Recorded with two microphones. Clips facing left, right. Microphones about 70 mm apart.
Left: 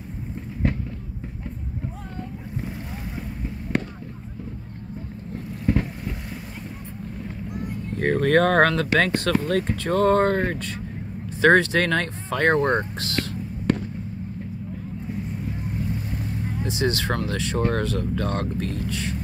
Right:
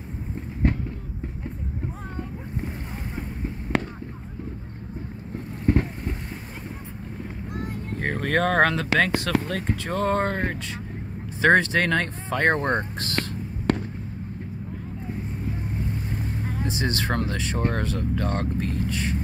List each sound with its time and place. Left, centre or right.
3.7 s fireworks: right
5.7 s vehicle: right
8.0 s speech: centre
11.4 s speech: right
16.6 s speech: right